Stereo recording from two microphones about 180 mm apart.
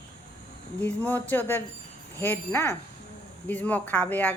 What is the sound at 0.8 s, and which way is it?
Speech, 10° left (ahead or behind).